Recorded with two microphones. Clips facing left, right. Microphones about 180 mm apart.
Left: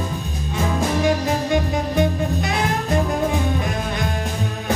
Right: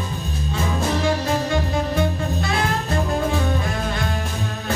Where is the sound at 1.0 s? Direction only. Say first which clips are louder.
Left 2 dB; 15° left (ahead or behind).